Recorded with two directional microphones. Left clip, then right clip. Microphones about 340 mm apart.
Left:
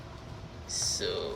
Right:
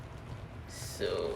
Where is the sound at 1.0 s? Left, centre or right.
Centre.